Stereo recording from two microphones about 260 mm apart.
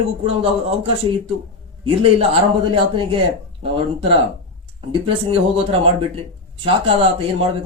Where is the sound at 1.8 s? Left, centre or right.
Right.